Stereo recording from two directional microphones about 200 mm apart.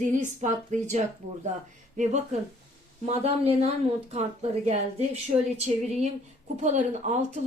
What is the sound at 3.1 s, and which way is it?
Speech, 30° right (ahead or behind).